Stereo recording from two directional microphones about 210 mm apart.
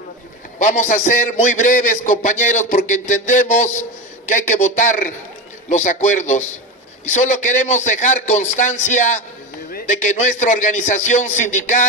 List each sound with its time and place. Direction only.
0.6 s a man's voice: 35° left (ahead or behind)